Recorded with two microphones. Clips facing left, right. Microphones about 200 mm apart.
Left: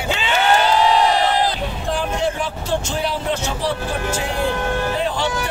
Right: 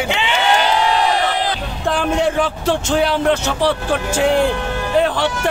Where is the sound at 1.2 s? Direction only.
80° right.